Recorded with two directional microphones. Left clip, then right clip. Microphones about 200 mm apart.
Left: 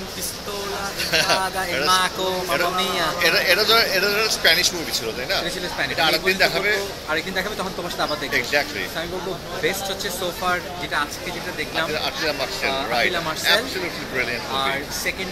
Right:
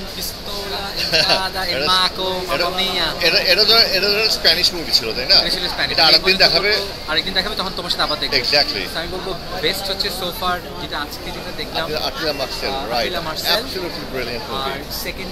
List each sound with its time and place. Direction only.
1.0 s speech: 15° right (ahead or behind)
1.9 s a man's voice: 5° left (ahead or behind)
3.2 s speech: 15° right (ahead or behind)
5.9 s speech: 25° right (ahead or behind)
7.1 s speech: 5° right (ahead or behind)
8.3 s speech: 20° right (ahead or behind)
9.6 s speech: centre (ahead or behind)
11.9 s speech: 20° right (ahead or behind)